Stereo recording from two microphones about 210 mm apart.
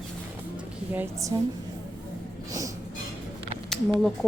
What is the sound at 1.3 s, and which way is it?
Speech, 20° right (ahead or behind).